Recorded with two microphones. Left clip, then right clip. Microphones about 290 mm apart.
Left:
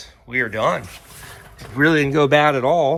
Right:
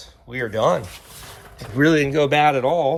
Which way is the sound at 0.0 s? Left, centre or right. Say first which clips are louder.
Left 5 dB; centre.